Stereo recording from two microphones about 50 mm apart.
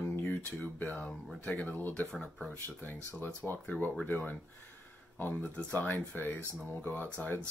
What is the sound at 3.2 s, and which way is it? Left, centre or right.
Speech, left.